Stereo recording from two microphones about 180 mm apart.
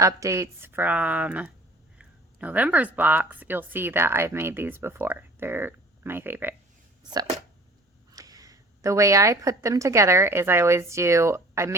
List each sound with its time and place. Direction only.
0.0 s speech: 15° right (ahead or behind)
7.0 s speech: 20° right (ahead or behind)